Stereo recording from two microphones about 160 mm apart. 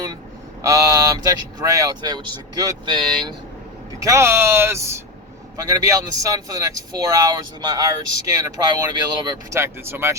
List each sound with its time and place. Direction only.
0.6 s speech: 20° right (ahead or behind)
4.0 s speech: 15° right (ahead or behind)